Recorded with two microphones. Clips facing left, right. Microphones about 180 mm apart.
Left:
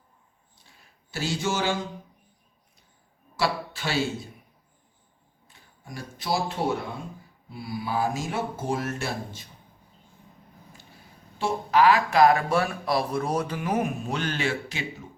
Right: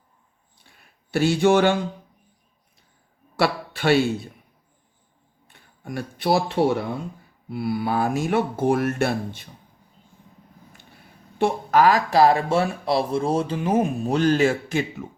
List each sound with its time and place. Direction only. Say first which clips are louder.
1.1 s speech: right 11 dB; 60° right (ahead or behind)
3.3 s a man's voice: right 4 dB; 60° right (ahead or behind)
5.5 s speech: right 9 dB; 60° right (ahead or behind)
11.3 s speech: right 3 dB; 50° right (ahead or behind)